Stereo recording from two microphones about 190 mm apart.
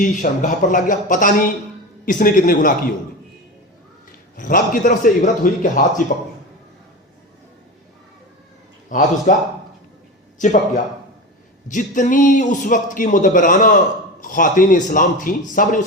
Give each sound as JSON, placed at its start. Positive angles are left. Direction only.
{"t": 0.0, "sound": "a man's voice", "side_deg": 40}
{"t": 4.4, "sound": "a man's voice", "side_deg": 45}
{"t": 8.9, "sound": "a man's voice", "side_deg": 40}
{"t": 10.3, "sound": "a man's voice", "side_deg": 40}
{"t": 11.7, "sound": "a man's voice", "side_deg": 45}